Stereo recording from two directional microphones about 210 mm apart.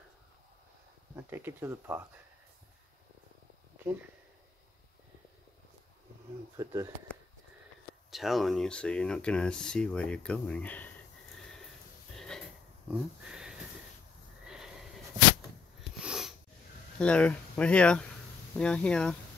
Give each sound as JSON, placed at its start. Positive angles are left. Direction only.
{"t": 1.1, "sound": "speech", "side_deg": -10}
{"t": 6.5, "sound": "speech", "side_deg": -15}
{"t": 8.1, "sound": "speech", "side_deg": 0}
{"t": 11.3, "sound": "sniff", "side_deg": 0}
{"t": 12.2, "sound": "a sound", "side_deg": 5}
{"t": 12.9, "sound": "speech", "side_deg": -5}
{"t": 14.4, "sound": "neigh", "side_deg": -5}
{"t": 16.0, "sound": "snort", "side_deg": -5}
{"t": 17.0, "sound": "speech", "side_deg": 5}